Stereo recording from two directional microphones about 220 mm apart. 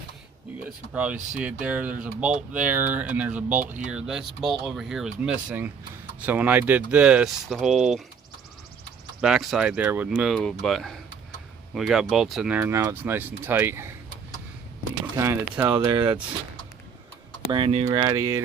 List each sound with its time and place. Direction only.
0.9 s speech: 5° right (ahead or behind)
9.2 s speech: centre (ahead or behind)
15.1 s speech: 10° right (ahead or behind)
17.5 s speech: 25° right (ahead or behind)